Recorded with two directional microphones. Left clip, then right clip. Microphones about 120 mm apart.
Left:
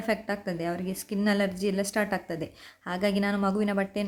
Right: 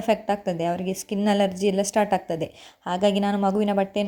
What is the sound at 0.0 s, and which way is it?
A woman's voice, 25° right (ahead or behind).